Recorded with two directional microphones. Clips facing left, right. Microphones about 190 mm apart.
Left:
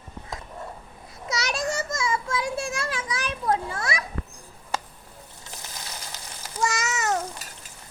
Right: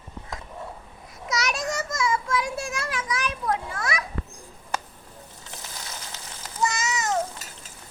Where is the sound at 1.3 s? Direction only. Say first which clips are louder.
Even; 30° left (ahead or behind).